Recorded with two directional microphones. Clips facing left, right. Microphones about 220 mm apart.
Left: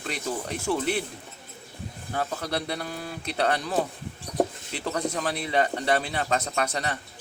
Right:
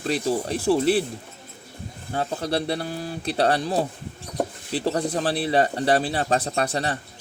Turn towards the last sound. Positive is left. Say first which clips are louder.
# right 4 dB
turn(degrees=-30)  # may be behind; listen again after turning